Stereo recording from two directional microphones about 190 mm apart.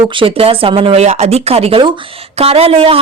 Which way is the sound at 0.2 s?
30° right (ahead or behind).